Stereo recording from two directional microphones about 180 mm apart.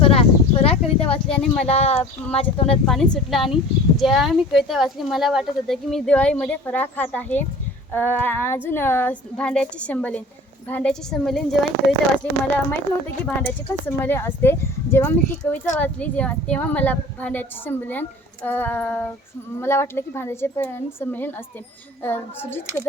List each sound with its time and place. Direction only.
0.0 s a sound: 30° left (ahead or behind)
1.3 s speech: 5° left (ahead or behind)
1.6 s speech: 35° left (ahead or behind)
2.8 s speech: 5° left (ahead or behind)
13.8 s speech: 10° left (ahead or behind)